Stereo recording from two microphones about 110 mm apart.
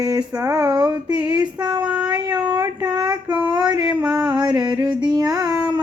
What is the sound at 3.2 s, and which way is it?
Female singing, 15° right (ahead or behind).